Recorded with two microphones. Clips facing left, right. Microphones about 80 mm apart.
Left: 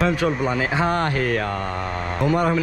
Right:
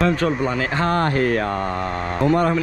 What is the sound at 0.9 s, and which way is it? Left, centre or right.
Speech, right.